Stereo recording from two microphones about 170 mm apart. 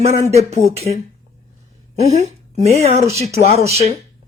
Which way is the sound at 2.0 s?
40° right (ahead or behind).